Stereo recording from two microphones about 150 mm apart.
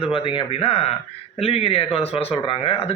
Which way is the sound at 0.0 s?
35° left (ahead or behind).